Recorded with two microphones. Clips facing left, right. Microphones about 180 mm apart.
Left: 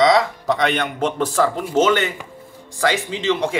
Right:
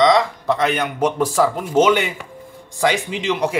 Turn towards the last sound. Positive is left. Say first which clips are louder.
# even
turn(degrees=-15)  # may be behind; listen again after turning